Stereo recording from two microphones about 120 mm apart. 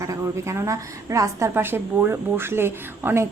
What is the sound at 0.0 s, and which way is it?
A woman's voice, 25° right (ahead or behind).